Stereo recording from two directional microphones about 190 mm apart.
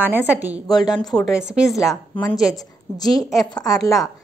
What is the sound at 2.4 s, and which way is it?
A woman's voice, 20° left (ahead or behind).